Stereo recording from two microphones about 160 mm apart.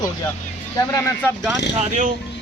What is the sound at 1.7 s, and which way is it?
Speech, 45° right (ahead or behind).